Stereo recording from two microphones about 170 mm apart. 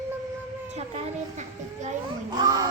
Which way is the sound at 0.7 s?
40° right (ahead or behind).